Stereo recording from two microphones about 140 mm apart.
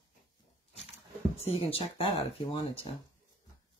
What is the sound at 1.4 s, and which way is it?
Speech, 45° left (ahead or behind).